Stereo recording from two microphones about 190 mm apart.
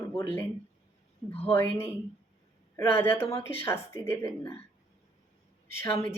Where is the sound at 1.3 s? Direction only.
30° left (ahead or behind).